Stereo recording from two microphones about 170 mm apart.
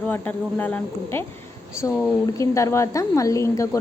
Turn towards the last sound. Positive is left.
turn(degrees=20)  # may be behind; listen again after turning